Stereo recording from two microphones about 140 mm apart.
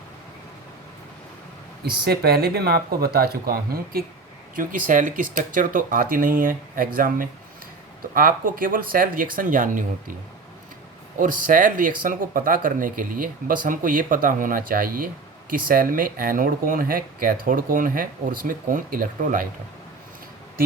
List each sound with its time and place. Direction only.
1.9 s speech: 90° right
4.5 s speech: 70° right (ahead or behind)
11.2 s speech: 70° right (ahead or behind); by 17.3 s 90° right
17.4 s speech: 75° right (ahead or behind)